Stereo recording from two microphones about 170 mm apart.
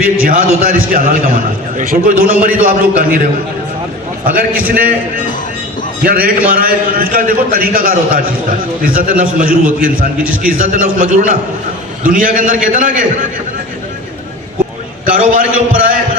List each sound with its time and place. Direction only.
0.2 s a man's voice: 60° right (ahead or behind)
4.3 s a man's voice: 60° right (ahead or behind)
6.0 s a man's voice: 60° right (ahead or behind)
15.0 s a man's voice: 55° right (ahead or behind)